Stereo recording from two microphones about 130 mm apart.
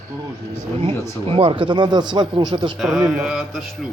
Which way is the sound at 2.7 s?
Centre (ahead or behind).